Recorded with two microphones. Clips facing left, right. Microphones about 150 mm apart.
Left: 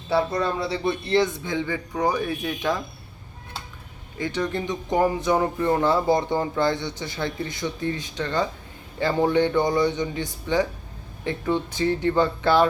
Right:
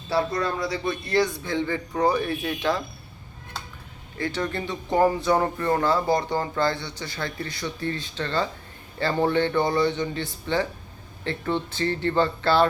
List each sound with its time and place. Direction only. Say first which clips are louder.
0.3 s speech: left 2 dB; 25° left (ahead or behind)
4.2 s speech: left 2 dB; 15° left (ahead or behind)